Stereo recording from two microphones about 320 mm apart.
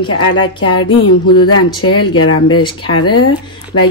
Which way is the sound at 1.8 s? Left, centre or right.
Left.